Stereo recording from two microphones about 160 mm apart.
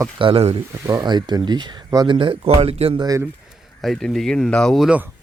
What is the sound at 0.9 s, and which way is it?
Speech, 25° right (ahead or behind).